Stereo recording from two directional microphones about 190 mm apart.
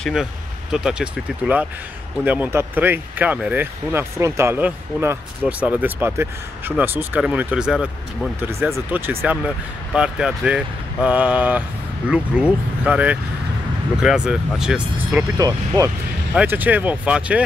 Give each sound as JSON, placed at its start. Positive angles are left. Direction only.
{"t": 0.0, "sound": "speech", "side_deg": 0}
{"t": 15.3, "sound": "speech", "side_deg": -20}